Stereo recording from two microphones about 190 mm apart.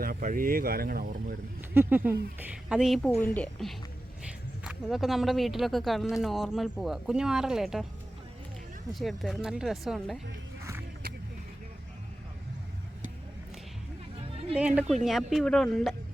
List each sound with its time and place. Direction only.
0.0 s speech: 50° right (ahead or behind)
1.7 s speech: 10° right (ahead or behind)
8.9 s speech: centre (ahead or behind)
15.0 s speech: centre (ahead or behind)